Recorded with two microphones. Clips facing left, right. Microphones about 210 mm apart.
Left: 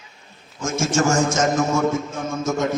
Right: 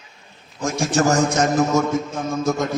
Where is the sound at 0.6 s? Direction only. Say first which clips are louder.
Right 1 dB; 35° right (ahead or behind).